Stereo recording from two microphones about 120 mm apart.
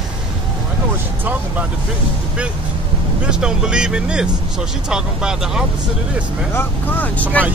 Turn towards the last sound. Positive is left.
turn(degrees=15)  # may be behind; listen again after turning